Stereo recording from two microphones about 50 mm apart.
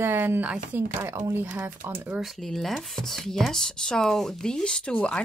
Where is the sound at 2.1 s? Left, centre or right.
Centre.